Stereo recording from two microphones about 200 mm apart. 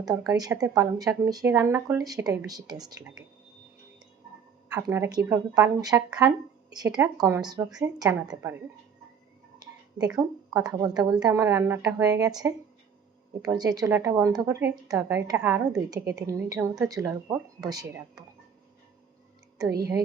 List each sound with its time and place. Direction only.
0.0 s a woman's voice: 20° right (ahead or behind)
4.7 s a woman's voice: 15° right (ahead or behind)
10.5 s a woman's voice: 15° right (ahead or behind)